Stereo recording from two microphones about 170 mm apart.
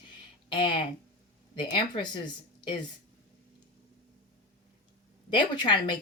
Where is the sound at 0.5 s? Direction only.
30° left (ahead or behind).